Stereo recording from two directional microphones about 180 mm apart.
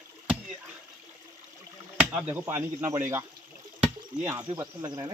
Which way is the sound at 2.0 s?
10° right (ahead or behind).